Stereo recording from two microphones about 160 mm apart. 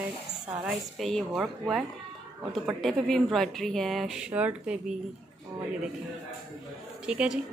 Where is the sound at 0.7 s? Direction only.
Centre (ahead or behind).